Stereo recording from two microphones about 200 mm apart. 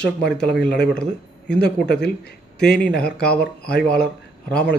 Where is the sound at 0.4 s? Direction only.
5° left (ahead or behind).